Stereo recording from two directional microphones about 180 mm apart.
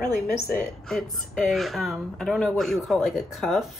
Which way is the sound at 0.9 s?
Centre (ahead or behind).